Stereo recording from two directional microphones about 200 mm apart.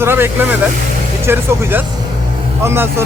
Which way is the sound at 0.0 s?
10° right (ahead or behind).